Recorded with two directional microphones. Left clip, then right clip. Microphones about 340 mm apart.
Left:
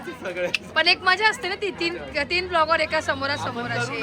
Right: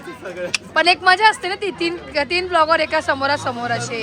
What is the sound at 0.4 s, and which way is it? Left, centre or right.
Speech, centre.